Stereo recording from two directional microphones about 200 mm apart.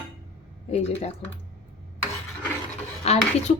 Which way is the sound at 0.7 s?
30° left (ahead or behind).